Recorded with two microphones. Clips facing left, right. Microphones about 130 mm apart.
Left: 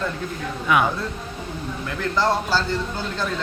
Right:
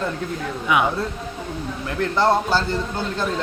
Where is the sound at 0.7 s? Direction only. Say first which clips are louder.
Even; 15° right (ahead or behind).